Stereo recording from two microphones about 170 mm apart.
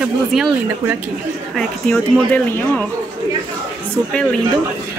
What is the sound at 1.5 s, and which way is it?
Speech, 5° left (ahead or behind).